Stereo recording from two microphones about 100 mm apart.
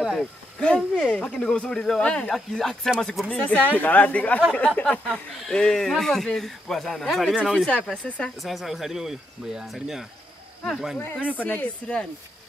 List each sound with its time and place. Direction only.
0.0 s speech: 5° right (ahead or behind)
0.6 s speech: 10° left (ahead or behind)
8.4 s speech: centre (ahead or behind)
11.0 s speech: 20° left (ahead or behind)